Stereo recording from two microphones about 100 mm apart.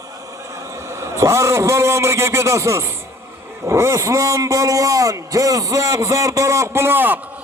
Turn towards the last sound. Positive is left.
turn(degrees=-20)  # may be behind; listen again after turning